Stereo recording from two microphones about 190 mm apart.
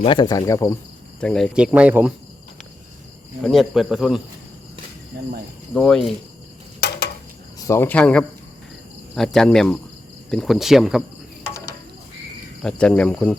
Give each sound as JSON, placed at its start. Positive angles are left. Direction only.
{"t": 0.0, "sound": "speech", "side_deg": 25}
{"t": 1.2, "sound": "speech", "side_deg": 5}
{"t": 3.4, "sound": "speech", "side_deg": 0}
{"t": 5.7, "sound": "speech", "side_deg": 5}
{"t": 6.7, "sound": "a sound", "side_deg": 60}
{"t": 7.6, "sound": "speech", "side_deg": 15}
{"t": 12.6, "sound": "speech", "side_deg": 5}